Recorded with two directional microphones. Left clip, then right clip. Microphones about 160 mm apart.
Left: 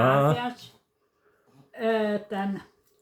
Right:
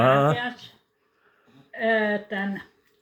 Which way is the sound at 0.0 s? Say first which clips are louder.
Right 2 dB; 5° left (ahead or behind).